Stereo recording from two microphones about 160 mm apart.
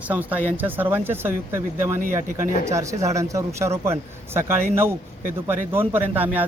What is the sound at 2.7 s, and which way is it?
Speech, 20° right (ahead or behind).